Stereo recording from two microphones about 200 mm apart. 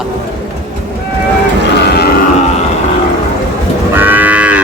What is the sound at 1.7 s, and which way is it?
Music, 55° left (ahead or behind).